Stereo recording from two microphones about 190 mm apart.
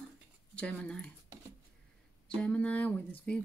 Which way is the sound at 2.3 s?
5° left (ahead or behind).